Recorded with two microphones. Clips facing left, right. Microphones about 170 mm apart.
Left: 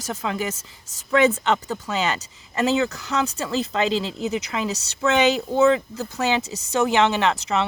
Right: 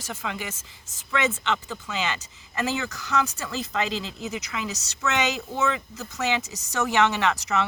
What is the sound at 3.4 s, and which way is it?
Speech, 30° left (ahead or behind).